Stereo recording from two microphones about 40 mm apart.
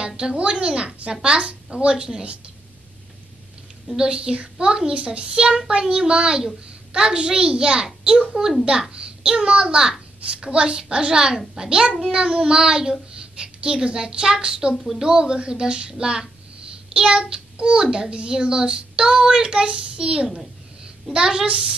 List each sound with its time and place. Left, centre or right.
0.2 s a child's voice: right
3.8 s a child's voice: centre
8.9 s child singing: right
9.4 s a child's voice: right
13.2 s a sound: right
13.8 s a child's voice: right
14.7 s speech: centre
15.0 s a child's voice: centre
15.9 s a sound: centre
16.9 s child singing: right
17.9 s a child's voice: right